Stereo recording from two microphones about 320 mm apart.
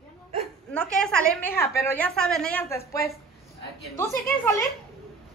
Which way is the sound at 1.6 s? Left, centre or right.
Centre.